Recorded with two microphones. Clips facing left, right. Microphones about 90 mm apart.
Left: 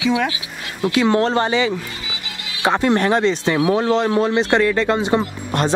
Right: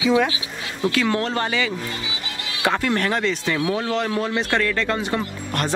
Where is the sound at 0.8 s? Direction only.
20° left (ahead or behind).